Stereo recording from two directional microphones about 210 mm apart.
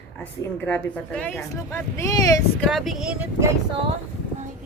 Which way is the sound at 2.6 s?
Centre (ahead or behind).